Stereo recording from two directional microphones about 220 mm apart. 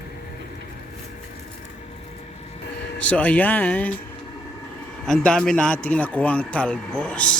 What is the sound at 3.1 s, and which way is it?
Speech, 5° left (ahead or behind).